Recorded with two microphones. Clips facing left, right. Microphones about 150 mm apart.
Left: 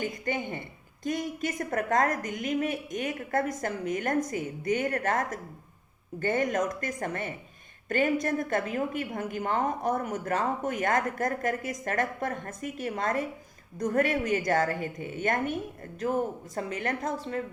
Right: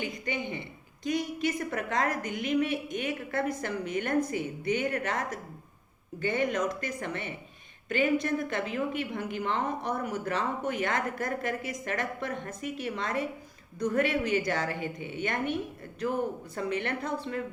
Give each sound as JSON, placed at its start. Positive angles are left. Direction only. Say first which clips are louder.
{"t": 0.0, "sound": "a woman's voice", "louder": "left 2 dB", "side_deg": 50}